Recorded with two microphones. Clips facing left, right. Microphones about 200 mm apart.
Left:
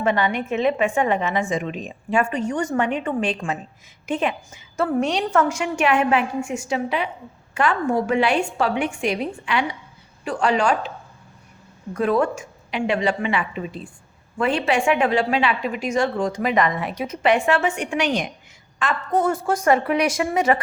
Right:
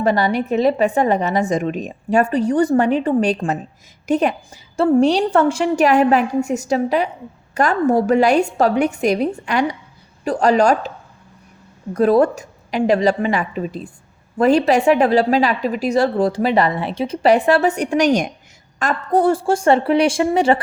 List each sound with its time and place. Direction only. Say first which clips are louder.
0.0 s a woman's voice: right 4 dB; 40° right (ahead or behind)
11.9 s a woman's voice: right 6 dB; 35° right (ahead or behind)